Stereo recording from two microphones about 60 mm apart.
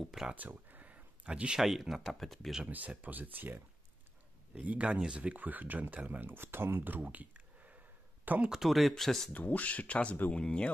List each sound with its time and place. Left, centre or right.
0.0 s speech: centre
0.3 s a sound: right
1.6 s speech: centre
2.7 s speech: right
4.6 s speech: centre
8.5 s speech: centre
9.3 s speech: left